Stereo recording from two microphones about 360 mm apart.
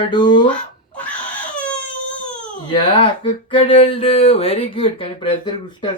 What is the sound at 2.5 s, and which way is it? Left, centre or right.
Speech, centre.